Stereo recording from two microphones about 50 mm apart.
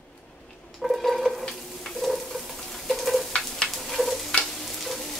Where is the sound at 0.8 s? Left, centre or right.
Centre.